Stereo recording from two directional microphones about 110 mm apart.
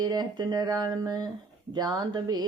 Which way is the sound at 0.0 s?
40° right (ahead or behind).